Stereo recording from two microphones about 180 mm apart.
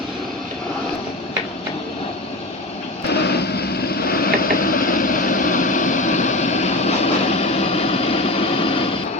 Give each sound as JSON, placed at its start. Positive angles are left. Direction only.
{"t": 3.1, "sound": "vehicle", "side_deg": 65}